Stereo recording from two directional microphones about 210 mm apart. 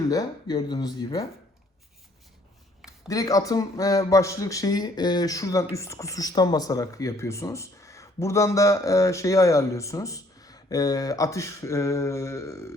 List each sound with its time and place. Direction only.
0.1 s speech: 20° left (ahead or behind)
3.1 s speech: 15° left (ahead or behind)